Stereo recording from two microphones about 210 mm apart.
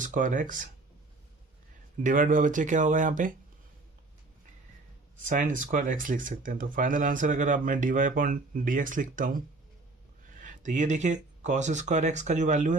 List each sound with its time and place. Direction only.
0.0 s speech: 40° right (ahead or behind)
2.0 s speech: 40° right (ahead or behind)
5.2 s speech: 40° right (ahead or behind)